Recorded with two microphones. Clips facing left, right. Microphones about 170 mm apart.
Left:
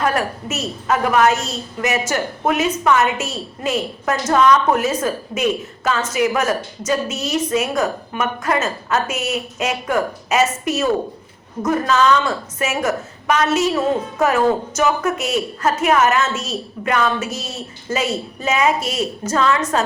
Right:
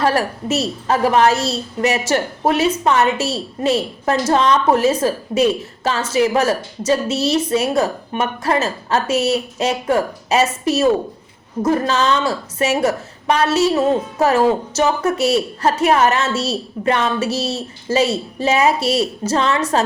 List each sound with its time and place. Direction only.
0.0 s a woman's voice: 30° right (ahead or behind)